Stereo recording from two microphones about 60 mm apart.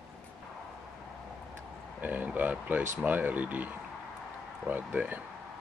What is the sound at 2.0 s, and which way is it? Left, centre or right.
Speech, right.